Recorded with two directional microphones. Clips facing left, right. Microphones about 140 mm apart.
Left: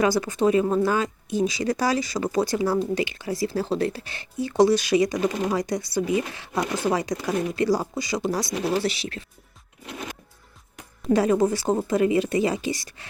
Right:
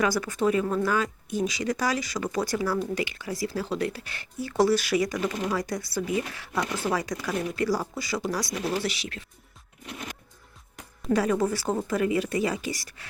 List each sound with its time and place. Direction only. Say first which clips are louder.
0.0 s speech: left 4 dB; 25° left (ahead or behind)
11.1 s speech: left 4 dB; 25° left (ahead or behind)